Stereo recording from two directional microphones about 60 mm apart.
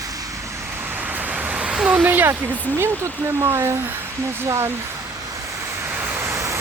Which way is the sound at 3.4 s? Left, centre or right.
Right.